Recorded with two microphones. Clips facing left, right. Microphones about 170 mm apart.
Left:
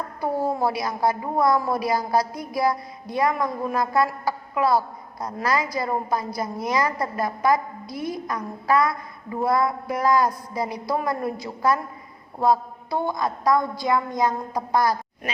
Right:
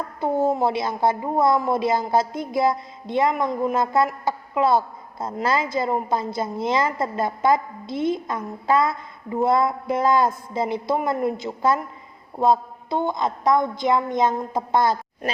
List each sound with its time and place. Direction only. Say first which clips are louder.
0.2 s a woman's voice: right 3 dB; 20° right (ahead or behind)